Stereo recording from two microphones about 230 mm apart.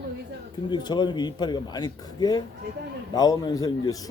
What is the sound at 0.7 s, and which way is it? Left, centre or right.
A man's voice, centre.